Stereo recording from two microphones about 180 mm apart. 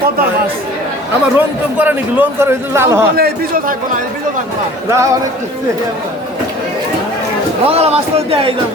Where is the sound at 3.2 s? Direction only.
55° right (ahead or behind).